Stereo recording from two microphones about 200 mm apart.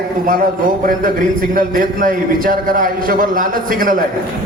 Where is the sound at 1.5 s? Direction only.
45° right (ahead or behind).